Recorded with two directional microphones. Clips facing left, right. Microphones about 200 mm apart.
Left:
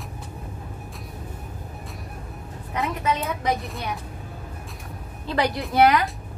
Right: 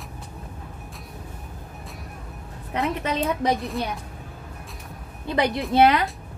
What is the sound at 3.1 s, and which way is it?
Speech, 35° right (ahead or behind).